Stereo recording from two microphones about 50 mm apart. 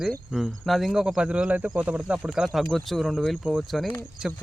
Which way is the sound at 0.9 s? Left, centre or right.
Centre.